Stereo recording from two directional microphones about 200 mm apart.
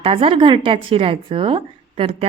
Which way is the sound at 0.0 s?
30° right (ahead or behind).